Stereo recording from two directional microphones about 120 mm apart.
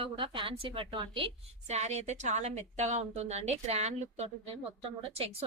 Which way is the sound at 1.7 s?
65° right (ahead or behind).